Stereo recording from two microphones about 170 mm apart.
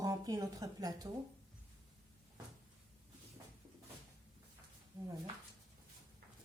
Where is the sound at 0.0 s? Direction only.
20° right (ahead or behind).